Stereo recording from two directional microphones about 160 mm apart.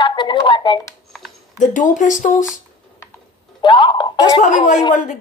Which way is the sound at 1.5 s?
50° left (ahead or behind).